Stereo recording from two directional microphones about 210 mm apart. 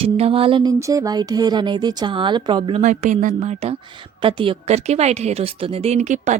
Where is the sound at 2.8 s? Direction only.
35° right (ahead or behind).